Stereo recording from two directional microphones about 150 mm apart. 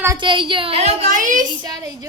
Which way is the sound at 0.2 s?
30° right (ahead or behind).